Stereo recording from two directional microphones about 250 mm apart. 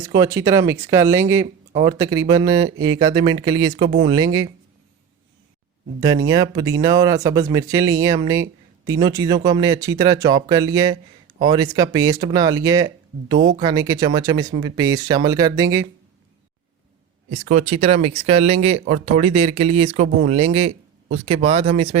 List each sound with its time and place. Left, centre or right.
0.2 s speech: centre
6.0 s speech: centre
17.2 s speech: right